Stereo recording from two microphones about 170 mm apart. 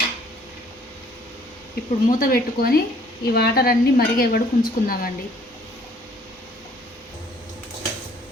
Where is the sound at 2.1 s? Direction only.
55° left (ahead or behind).